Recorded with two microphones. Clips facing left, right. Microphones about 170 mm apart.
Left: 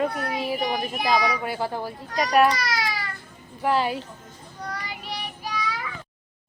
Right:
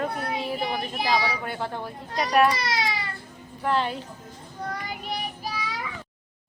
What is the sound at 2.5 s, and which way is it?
Baby cry, 25° right (ahead or behind).